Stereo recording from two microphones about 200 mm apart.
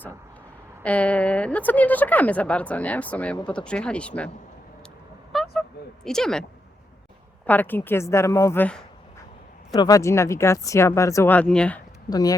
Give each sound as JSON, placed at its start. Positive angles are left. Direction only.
{"t": 0.8, "sound": "a woman's voice", "side_deg": 5}
{"t": 5.3, "sound": "a sound", "side_deg": 0}
{"t": 6.1, "sound": "speech", "side_deg": 5}
{"t": 7.4, "sound": "a woman's voice", "side_deg": 10}
{"t": 12.1, "sound": "speech", "side_deg": 20}